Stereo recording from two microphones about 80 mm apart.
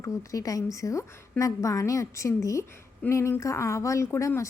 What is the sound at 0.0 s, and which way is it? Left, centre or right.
Speech, left.